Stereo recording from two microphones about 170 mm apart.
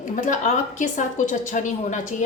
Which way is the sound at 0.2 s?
50° left (ahead or behind).